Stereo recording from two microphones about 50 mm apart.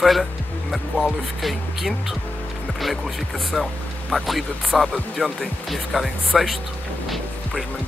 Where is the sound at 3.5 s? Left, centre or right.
Centre.